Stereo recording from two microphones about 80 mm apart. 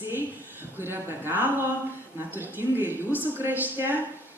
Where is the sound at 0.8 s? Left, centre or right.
Right.